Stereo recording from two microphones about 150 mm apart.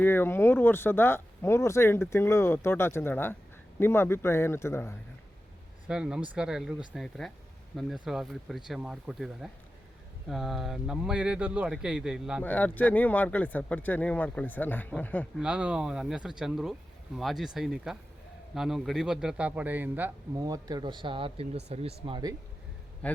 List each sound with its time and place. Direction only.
0.0 s speech: 15° left (ahead or behind)
5.9 s speech: 5° right (ahead or behind)
12.4 s speech: 10° left (ahead or behind)
15.4 s a man's voice: 5° right (ahead or behind)
20.4 s speech: 25° right (ahead or behind)
23.0 s a man's voice: 10° left (ahead or behind)